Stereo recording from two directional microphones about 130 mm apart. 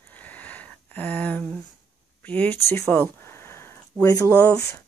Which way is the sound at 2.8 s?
10° left (ahead or behind).